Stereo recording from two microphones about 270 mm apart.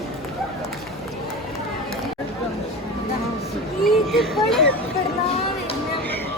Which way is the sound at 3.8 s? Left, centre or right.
Centre.